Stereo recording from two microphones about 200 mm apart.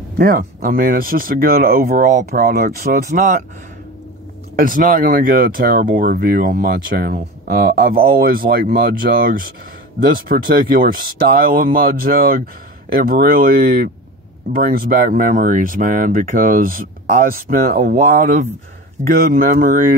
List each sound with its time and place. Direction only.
0.2 s speech: 45° right (ahead or behind)
4.6 s speech: 45° right (ahead or behind)